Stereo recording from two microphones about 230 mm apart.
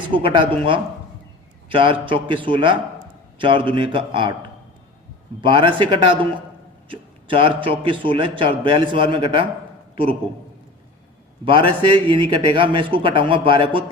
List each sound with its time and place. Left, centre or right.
0.1 s a man's voice: right
5.4 s a man's voice: right
11.4 s a man's voice: right